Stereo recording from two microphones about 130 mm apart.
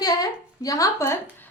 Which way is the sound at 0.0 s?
30° left (ahead or behind).